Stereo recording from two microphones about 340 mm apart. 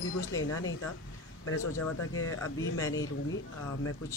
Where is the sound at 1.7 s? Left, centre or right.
Left.